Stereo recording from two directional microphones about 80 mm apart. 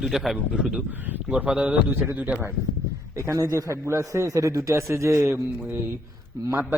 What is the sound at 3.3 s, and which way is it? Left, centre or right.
A man's voice, right.